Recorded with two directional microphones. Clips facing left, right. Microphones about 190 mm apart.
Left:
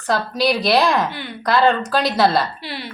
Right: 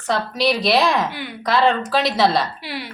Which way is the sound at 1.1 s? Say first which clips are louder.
Even; 10° right (ahead or behind).